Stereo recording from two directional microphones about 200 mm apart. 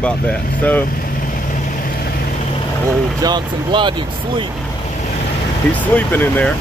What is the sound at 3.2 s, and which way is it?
Speech, 20° right (ahead or behind).